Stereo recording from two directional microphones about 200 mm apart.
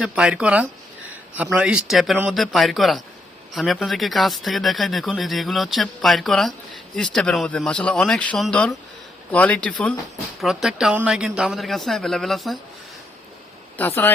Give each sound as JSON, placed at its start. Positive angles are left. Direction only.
{"t": 0.0, "sound": "speech", "side_deg": -5}
{"t": 13.7, "sound": "speech", "side_deg": 10}